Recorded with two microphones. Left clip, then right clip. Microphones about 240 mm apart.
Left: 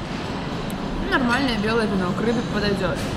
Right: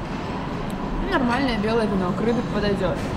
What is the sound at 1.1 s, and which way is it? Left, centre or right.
Speech, centre.